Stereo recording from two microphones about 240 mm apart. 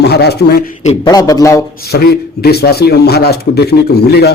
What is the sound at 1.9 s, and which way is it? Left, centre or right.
A man's voice, left.